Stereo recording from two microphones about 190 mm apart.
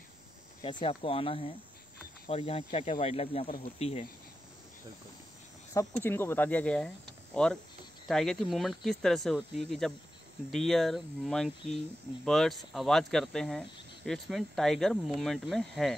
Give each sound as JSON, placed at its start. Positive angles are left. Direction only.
{"t": 0.6, "sound": "speech", "side_deg": 25}
{"t": 3.4, "sound": "speech", "side_deg": 50}
{"t": 3.8, "sound": "speech", "side_deg": 30}
{"t": 5.7, "sound": "speech", "side_deg": 10}